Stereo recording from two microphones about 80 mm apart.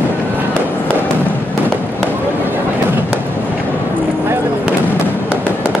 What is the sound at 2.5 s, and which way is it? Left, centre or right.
Fireworks, right.